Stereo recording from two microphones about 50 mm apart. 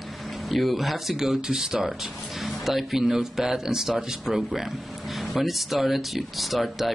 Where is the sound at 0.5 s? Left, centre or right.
Centre.